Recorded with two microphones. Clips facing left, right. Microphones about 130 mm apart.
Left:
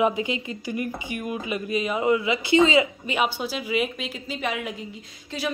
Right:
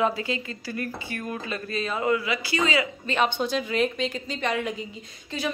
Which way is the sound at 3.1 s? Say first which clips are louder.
Right 1 dB; 10° left (ahead or behind).